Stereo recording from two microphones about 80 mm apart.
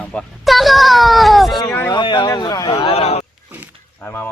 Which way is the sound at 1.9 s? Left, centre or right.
Left.